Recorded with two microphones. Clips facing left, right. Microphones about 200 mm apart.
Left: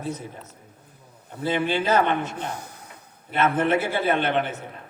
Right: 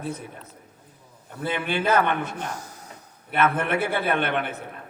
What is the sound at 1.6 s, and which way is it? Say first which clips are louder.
Speech: even; 55° right (ahead or behind).